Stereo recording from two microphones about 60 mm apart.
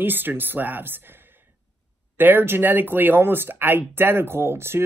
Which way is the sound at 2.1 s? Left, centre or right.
Right.